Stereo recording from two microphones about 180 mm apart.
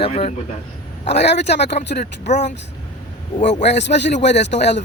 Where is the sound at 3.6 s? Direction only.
75° left (ahead or behind).